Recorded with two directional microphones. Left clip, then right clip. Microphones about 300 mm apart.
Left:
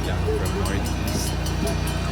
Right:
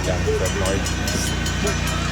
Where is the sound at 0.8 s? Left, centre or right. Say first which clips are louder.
Right 4 dB; left.